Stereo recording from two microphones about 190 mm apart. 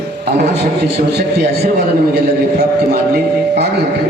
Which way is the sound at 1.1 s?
55° right (ahead or behind).